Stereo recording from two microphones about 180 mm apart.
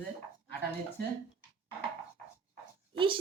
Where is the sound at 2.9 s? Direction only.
30° right (ahead or behind).